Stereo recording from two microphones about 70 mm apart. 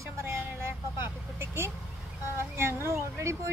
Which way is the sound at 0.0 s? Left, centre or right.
Right.